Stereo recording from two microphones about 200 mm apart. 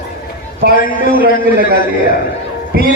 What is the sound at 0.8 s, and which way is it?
Speech, 45° left (ahead or behind).